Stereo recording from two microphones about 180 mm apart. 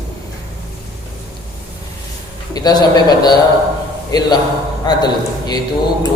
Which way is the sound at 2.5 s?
20° left (ahead or behind).